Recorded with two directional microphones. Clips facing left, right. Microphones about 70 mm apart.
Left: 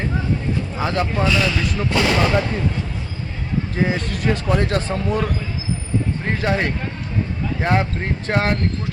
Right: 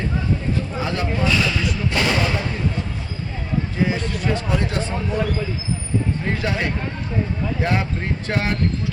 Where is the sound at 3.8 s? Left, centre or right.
Left.